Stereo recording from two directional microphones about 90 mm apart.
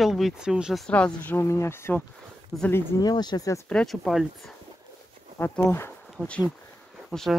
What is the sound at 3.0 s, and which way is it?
Speech, 50° left (ahead or behind).